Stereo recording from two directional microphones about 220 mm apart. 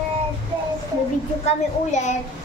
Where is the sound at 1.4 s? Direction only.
30° left (ahead or behind).